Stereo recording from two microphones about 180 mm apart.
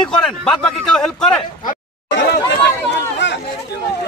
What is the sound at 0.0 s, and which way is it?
A man's voice, 5° left (ahead or behind).